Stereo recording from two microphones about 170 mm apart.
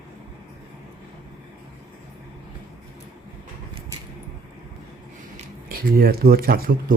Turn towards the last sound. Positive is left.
turn(degrees=-60)  # may be behind; listen again after turning